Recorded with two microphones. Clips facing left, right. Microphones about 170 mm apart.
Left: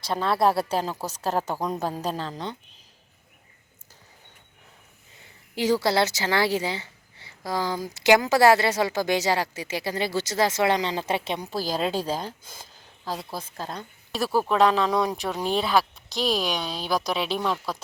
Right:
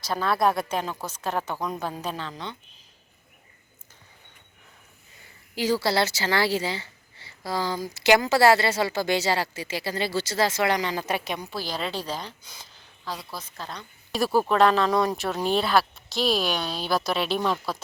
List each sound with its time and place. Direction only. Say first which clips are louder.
0.0 s speech: left 1 dB; 25° left (ahead or behind)
5.5 s a woman's voice: left 2 dB; 20° left (ahead or behind)
11.5 s a woman's voice: left 7 dB; 40° left (ahead or behind)
14.4 s speech: left 1 dB; centre (ahead or behind)
16.4 s speech: right 1 dB; 15° left (ahead or behind)
16.6 s a woman's voice: even; 5° right (ahead or behind)